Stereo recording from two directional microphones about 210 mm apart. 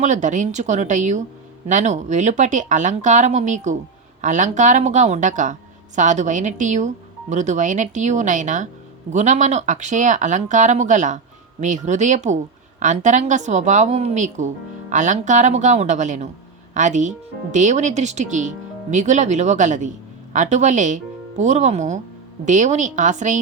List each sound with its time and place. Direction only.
0.0 s a woman's voice: 35° right (ahead or behind)